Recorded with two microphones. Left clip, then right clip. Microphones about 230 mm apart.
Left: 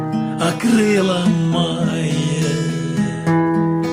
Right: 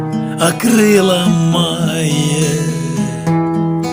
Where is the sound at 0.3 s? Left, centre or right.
Right.